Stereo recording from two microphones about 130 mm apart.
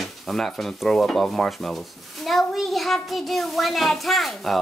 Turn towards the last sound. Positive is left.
turn(degrees=0)  # may be behind; listen again after turning